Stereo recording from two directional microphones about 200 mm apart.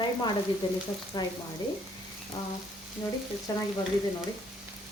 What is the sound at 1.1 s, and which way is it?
Speech, 20° left (ahead or behind).